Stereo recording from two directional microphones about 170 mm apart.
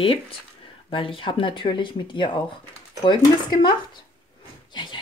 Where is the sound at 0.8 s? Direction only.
30° left (ahead or behind).